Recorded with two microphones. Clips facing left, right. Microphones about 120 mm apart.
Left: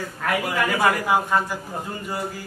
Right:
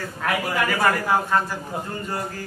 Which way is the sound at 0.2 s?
Centre (ahead or behind).